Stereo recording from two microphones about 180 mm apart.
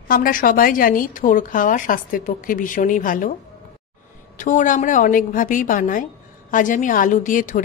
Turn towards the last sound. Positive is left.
turn(degrees=50)  # may be behind; listen again after turning